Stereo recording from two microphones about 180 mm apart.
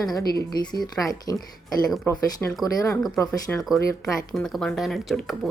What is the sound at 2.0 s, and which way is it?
A woman's voice, 15° left (ahead or behind).